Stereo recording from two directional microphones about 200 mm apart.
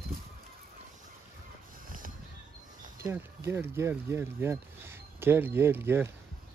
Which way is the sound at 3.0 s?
15° right (ahead or behind).